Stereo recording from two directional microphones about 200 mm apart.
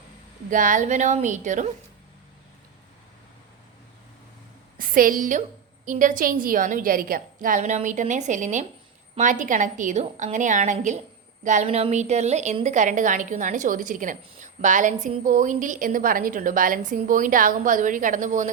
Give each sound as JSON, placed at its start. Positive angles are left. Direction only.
{"t": 0.5, "sound": "a woman's voice", "side_deg": -40}
{"t": 4.8, "sound": "a woman's voice", "side_deg": -45}